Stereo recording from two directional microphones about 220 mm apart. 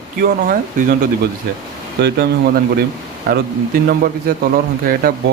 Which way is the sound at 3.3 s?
40° right (ahead or behind).